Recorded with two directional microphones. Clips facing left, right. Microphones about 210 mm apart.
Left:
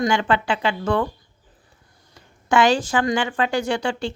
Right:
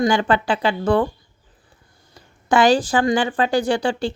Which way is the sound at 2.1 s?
35° right (ahead or behind).